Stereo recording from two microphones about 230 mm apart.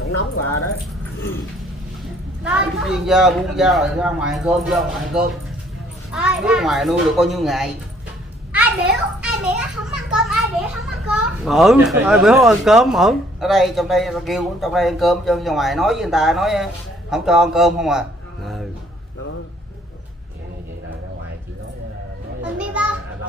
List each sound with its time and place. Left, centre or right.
0.3 s speech: left
2.4 s a child's voice: centre